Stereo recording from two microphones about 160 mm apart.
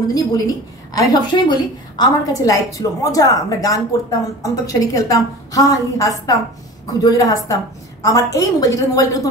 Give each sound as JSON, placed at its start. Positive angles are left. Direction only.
{"t": 0.9, "sound": "a woman's voice", "side_deg": 25}